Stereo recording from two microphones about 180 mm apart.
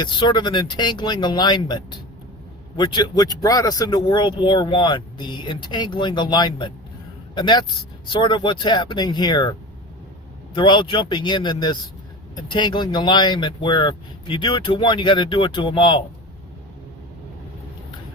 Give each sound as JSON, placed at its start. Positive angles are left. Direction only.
{"t": 0.0, "sound": "speech", "side_deg": 25}
{"t": 10.5, "sound": "speech", "side_deg": 25}